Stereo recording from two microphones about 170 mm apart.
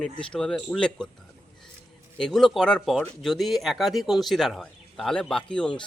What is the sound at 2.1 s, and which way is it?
Speech, centre (ahead or behind).